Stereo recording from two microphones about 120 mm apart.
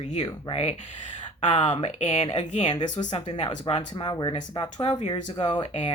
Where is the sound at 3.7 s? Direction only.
50° left (ahead or behind).